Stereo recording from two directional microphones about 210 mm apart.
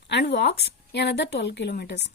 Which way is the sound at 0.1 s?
55° left (ahead or behind).